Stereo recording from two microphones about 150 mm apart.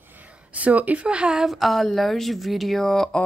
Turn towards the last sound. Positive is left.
turn(degrees=5)  # may be behind; listen again after turning